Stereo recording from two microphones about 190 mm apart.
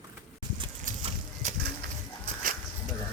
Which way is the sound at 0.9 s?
45° right (ahead or behind).